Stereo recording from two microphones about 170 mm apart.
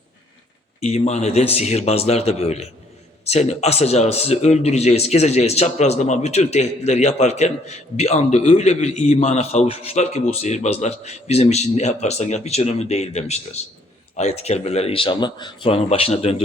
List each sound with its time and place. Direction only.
0.8 s speech: 40° left (ahead or behind)